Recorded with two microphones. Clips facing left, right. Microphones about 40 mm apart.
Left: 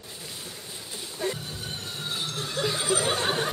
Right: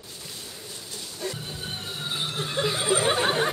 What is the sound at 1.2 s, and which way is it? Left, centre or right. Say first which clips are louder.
Music: left 3 dB; left.